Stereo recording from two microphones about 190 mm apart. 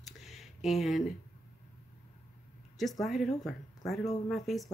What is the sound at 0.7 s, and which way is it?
Speech, centre (ahead or behind).